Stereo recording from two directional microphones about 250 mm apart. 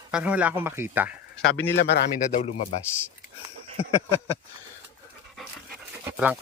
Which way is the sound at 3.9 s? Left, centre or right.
Centre.